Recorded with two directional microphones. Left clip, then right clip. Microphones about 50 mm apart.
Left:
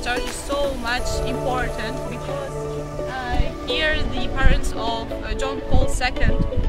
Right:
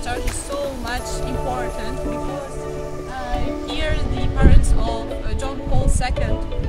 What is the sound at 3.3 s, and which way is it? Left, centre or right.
Music, centre.